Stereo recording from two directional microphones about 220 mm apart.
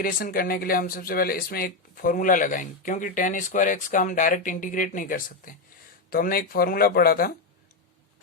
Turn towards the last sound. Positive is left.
turn(degrees=40)  # may be behind; listen again after turning